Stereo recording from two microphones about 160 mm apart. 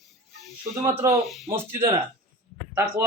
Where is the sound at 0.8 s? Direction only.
15° right (ahead or behind).